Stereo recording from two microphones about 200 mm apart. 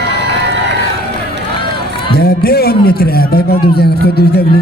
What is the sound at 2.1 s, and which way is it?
A man's voice, 50° left (ahead or behind).